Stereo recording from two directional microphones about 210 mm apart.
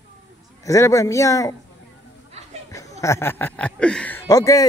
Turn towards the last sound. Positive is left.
turn(degrees=15)  # may be behind; listen again after turning